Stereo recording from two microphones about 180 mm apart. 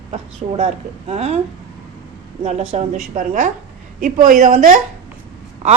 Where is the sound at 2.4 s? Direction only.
35° right (ahead or behind).